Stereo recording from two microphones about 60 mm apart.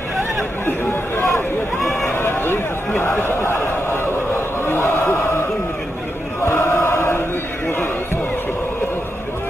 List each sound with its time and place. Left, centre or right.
1.8 s run: centre
2.0 s a sound: left
6.4 s chant: left